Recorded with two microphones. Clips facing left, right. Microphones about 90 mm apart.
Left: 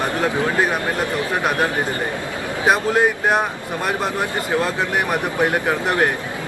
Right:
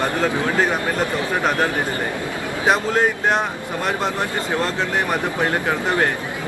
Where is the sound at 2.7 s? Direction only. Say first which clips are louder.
Left 1 dB; 10° left (ahead or behind).